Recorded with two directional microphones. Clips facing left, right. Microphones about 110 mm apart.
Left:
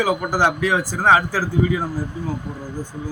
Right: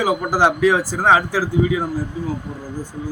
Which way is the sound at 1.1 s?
25° right (ahead or behind).